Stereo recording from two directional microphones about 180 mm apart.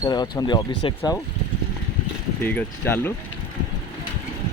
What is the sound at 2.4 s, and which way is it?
Speech, 10° left (ahead or behind).